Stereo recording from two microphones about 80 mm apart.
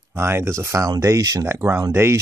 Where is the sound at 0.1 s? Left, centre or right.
Right.